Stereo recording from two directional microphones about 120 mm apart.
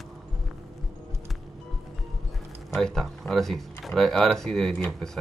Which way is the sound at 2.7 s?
5° left (ahead or behind).